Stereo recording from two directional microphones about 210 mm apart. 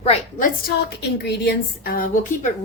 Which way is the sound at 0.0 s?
35° left (ahead or behind).